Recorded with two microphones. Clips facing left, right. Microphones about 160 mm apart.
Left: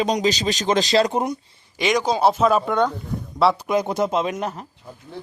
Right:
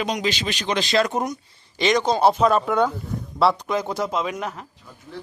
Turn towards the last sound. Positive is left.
turn(degrees=25)  # may be behind; listen again after turning